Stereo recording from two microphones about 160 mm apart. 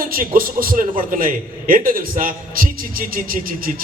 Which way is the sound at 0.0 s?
60° right (ahead or behind).